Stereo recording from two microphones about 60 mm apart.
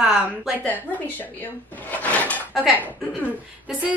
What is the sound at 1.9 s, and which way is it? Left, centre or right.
Drawer open or close, left.